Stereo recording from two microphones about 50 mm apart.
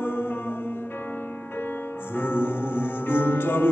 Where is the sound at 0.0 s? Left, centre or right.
Left.